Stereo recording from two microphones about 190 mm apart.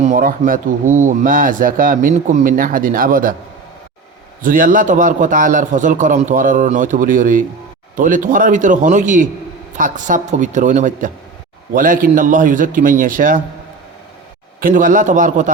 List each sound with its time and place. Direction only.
0.0 s speech: 45° right (ahead or behind)
4.4 s speech: 45° right (ahead or behind)
14.6 s speech: 45° right (ahead or behind)